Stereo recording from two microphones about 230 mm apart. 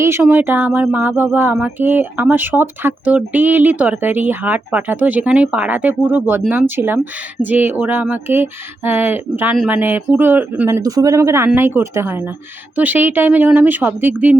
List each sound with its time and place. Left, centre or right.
0.0 s speech: centre